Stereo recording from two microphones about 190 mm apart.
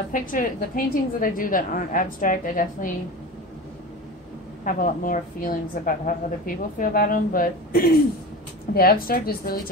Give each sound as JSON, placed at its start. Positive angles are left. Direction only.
{"t": 0.1, "sound": "a woman's voice", "side_deg": 45}
{"t": 4.6, "sound": "a woman's voice", "side_deg": 45}